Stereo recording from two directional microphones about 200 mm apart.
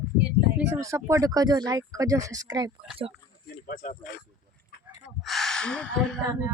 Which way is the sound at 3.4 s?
50° left (ahead or behind).